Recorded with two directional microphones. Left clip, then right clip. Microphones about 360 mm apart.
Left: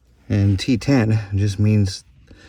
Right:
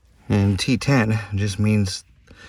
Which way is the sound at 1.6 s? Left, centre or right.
Right.